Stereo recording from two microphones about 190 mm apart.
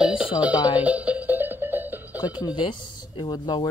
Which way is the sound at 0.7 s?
5° right (ahead or behind).